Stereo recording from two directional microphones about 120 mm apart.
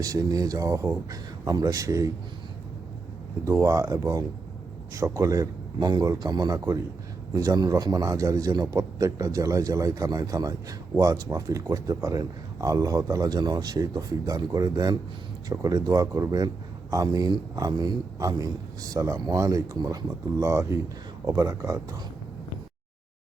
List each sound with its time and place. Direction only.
0.0 s a man's voice: 30° right (ahead or behind)
3.4 s a man's voice: 25° right (ahead or behind)